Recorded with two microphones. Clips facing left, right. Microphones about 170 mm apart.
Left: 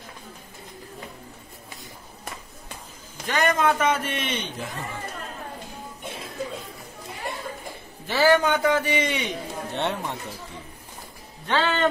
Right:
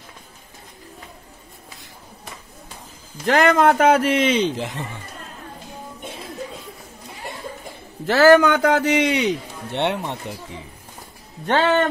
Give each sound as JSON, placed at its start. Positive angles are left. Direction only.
{"t": 3.3, "sound": "speech", "side_deg": -80}
{"t": 8.1, "sound": "a man's voice", "side_deg": -85}
{"t": 11.4, "sound": "speech", "side_deg": -50}